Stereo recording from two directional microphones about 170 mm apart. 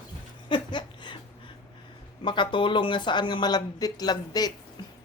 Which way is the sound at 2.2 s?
30° left (ahead or behind).